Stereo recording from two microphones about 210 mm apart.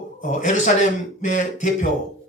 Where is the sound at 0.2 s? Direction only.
35° left (ahead or behind).